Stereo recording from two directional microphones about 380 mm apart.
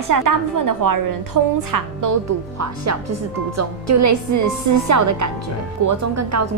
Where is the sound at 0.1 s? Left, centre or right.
Right.